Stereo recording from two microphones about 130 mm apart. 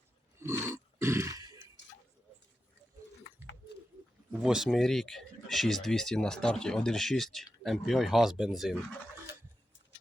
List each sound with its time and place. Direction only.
0.3 s roar: 20° right (ahead or behind)
4.3 s speech: 5° right (ahead or behind)